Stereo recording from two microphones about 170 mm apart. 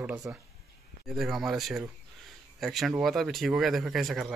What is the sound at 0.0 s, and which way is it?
Speech, 10° right (ahead or behind).